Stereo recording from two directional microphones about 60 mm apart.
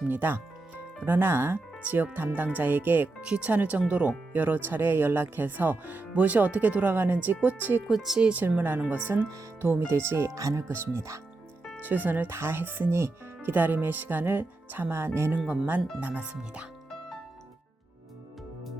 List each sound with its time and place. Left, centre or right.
0.1 s speech: right
1.8 s speech: right
3.2 s speech: centre
7.9 s speech: centre
8.3 s speech: right
9.9 s speech: right
10.3 s speech: right
10.7 s speech: right
11.8 s speech: right
12.3 s speech: right
15.4 s speech: right